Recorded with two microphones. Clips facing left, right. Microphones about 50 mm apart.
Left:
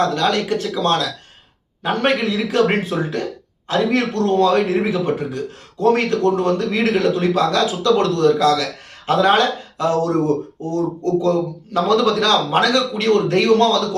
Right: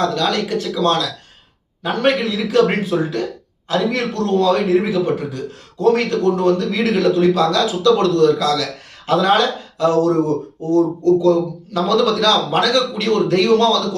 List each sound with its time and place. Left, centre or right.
0.0 s speech: left
1.8 s speech: left